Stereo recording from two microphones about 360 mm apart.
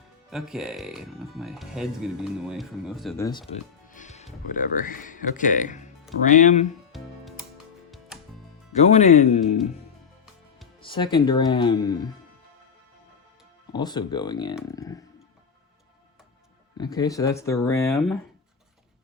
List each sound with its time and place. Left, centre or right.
0.3 s speech: centre
3.8 s music: left
4.5 s speech: left
6.9 s music: centre
8.7 s speech: centre
10.8 s speech: centre
13.7 s speech: centre
16.7 s speech: centre